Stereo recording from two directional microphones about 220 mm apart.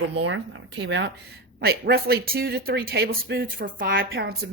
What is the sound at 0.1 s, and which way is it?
Speech, 55° right (ahead or behind).